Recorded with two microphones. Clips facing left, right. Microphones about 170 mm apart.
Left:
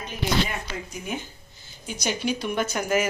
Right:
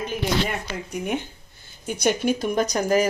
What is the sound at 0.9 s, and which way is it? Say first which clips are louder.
Speech: right 10 dB; 65° right (ahead or behind).